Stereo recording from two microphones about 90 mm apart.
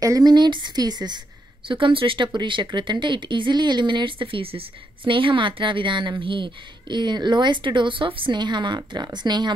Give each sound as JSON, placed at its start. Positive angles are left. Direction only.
{"t": 0.0, "sound": "speech", "side_deg": -45}
{"t": 1.7, "sound": "speech", "side_deg": -70}